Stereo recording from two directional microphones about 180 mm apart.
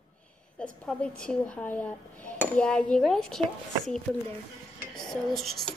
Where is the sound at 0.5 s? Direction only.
5° left (ahead or behind).